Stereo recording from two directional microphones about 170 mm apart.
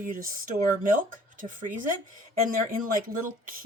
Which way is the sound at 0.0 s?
55° right (ahead or behind).